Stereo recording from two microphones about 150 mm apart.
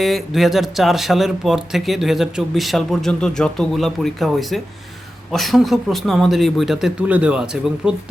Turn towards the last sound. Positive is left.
turn(degrees=-5)  # may be behind; listen again after turning